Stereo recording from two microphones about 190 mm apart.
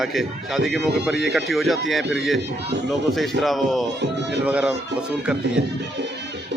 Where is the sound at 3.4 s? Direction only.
Centre (ahead or behind).